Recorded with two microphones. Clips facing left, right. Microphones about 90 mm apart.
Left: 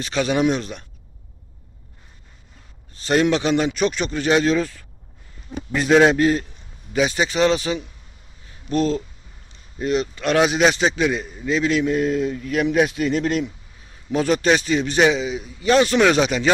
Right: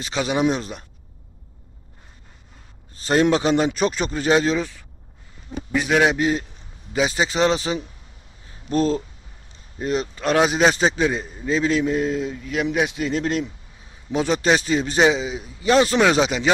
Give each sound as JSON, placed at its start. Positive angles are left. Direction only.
{"t": 0.0, "sound": "a man's voice", "side_deg": -20}
{"t": 2.9, "sound": "a man's voice", "side_deg": -25}
{"t": 6.0, "sound": "a man's voice", "side_deg": -15}
{"t": 8.4, "sound": "a sound", "side_deg": -30}
{"t": 9.8, "sound": "a man's voice", "side_deg": -30}